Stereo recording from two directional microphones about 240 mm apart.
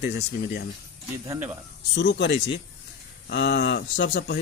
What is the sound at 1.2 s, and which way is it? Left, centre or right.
Speech, centre.